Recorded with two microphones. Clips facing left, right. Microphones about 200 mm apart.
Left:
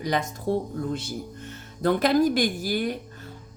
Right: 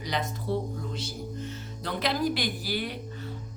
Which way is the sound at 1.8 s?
50° left (ahead or behind).